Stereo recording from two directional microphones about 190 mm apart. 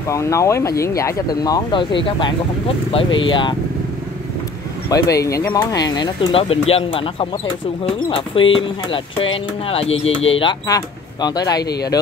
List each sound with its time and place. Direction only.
0.1 s speech: 15° left (ahead or behind)
4.8 s speech: 20° left (ahead or behind)